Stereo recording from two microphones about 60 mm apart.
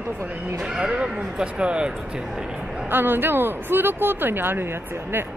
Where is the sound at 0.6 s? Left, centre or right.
Centre.